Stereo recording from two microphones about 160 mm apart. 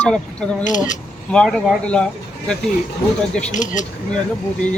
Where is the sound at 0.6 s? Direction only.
50° left (ahead or behind).